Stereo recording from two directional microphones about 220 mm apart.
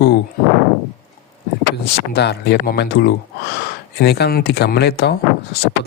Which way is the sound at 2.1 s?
50° left (ahead or behind).